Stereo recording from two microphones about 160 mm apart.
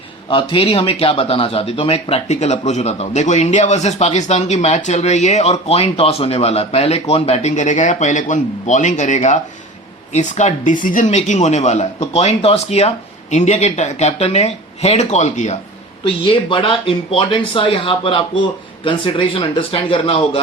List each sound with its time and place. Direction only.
0.3 s speech: 35° left (ahead or behind)
16.0 s speech: 35° left (ahead or behind)